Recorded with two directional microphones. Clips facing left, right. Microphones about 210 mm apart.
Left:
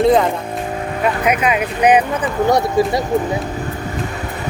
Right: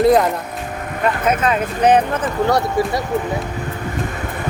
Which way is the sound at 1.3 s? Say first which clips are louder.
Left 1 dB; 15° left (ahead or behind).